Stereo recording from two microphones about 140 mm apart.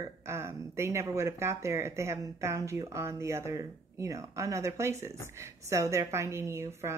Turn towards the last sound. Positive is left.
turn(degrees=-20)  # may be behind; listen again after turning